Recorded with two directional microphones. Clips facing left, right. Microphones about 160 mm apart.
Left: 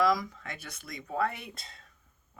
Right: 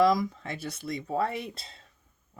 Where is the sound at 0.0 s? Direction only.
25° right (ahead or behind).